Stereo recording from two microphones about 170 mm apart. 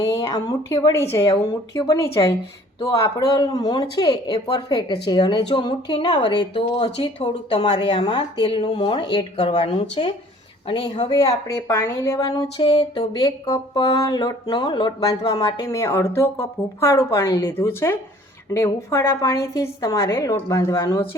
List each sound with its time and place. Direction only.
0.0 s speech: 20° left (ahead or behind)
10.7 s speech: 25° left (ahead or behind)
13.1 s speech: 20° left (ahead or behind)